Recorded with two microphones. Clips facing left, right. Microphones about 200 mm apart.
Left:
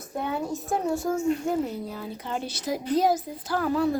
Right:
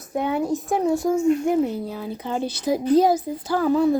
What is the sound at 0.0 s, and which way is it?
A woman's voice, 20° right (ahead or behind).